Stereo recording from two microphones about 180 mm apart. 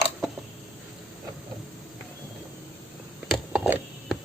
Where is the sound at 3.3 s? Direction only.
5° right (ahead or behind).